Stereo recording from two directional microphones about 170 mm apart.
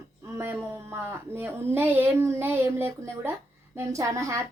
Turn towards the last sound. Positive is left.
turn(degrees=-20)  # may be behind; listen again after turning